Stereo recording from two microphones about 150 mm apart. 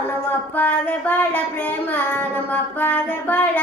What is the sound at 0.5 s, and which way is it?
Child singing, 10° left (ahead or behind).